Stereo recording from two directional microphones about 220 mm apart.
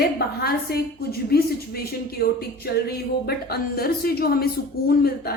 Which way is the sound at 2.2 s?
45° left (ahead or behind).